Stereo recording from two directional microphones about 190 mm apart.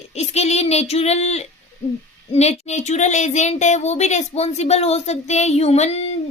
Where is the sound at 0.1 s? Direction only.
35° left (ahead or behind).